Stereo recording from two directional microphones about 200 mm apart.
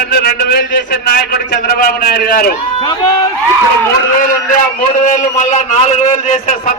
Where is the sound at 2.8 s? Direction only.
20° left (ahead or behind).